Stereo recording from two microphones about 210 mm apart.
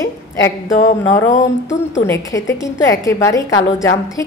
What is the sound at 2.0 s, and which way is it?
A woman's voice, 15° left (ahead or behind).